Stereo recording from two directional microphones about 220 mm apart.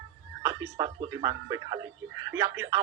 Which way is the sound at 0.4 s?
15° right (ahead or behind).